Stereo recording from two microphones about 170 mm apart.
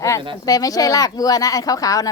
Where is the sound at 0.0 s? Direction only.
20° left (ahead or behind).